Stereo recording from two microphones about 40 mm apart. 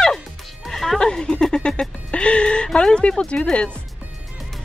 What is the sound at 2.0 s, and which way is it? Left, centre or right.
Music, left.